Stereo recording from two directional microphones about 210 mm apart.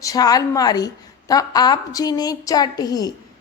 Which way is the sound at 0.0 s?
15° left (ahead or behind).